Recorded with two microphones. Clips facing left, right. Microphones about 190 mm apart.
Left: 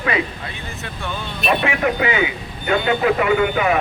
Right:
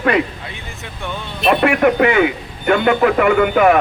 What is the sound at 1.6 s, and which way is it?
A man's voice, 55° right (ahead or behind).